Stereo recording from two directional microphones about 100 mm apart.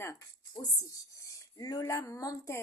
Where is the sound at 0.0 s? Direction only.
30° left (ahead or behind).